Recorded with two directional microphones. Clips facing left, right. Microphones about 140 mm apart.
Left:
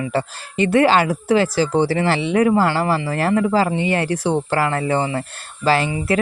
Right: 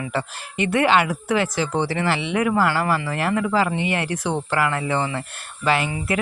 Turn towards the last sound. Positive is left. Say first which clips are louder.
# left 3 dB
turn(degrees=35)  # may be behind; listen again after turning